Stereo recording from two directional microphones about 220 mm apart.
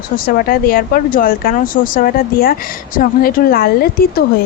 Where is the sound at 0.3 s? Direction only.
40° left (ahead or behind).